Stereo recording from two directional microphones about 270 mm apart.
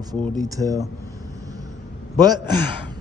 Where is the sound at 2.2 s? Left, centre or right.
Centre.